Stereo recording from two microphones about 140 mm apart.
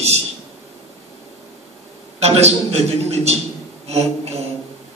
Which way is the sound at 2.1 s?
50° right (ahead or behind).